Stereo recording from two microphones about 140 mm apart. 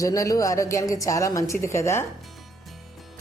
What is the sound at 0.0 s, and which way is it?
A woman's voice, 25° left (ahead or behind).